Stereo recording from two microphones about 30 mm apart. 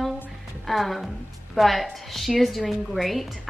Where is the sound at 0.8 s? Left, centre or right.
Centre.